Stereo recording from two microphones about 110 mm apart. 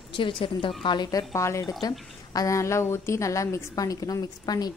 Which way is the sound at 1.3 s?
25° left (ahead or behind).